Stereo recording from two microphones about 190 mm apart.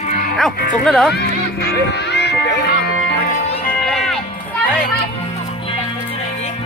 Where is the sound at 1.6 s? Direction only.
60° left (ahead or behind).